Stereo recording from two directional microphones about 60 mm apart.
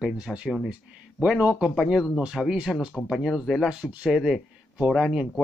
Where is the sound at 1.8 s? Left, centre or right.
Centre.